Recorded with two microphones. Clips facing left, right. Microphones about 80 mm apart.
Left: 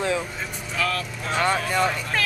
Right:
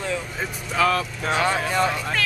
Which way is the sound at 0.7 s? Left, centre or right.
Centre.